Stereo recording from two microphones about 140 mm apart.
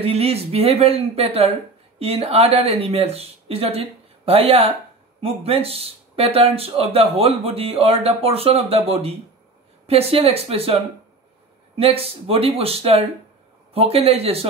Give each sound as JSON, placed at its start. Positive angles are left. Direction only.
{"t": 0.0, "sound": "speech", "side_deg": -45}